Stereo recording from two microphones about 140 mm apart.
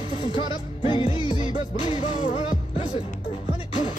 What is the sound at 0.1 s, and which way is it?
Music, 40° left (ahead or behind).